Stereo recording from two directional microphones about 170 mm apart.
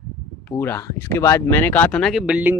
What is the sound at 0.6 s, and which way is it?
Speech, 10° left (ahead or behind).